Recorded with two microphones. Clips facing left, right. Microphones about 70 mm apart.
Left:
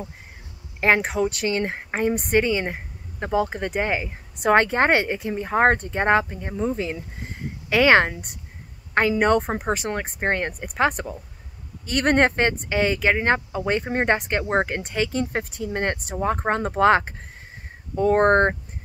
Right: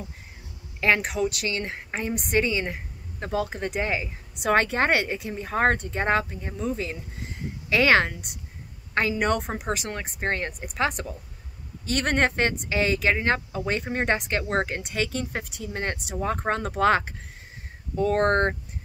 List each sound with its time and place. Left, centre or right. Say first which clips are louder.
0.7 s speech: left 3 dB; left
6.3 s speech: left 4 dB; left
6.6 s speech: left 4 dB; left
14.4 s speech: left 4 dB; left
14.7 s speech: left 3 dB; left
16.3 s speech: left 4 dB; left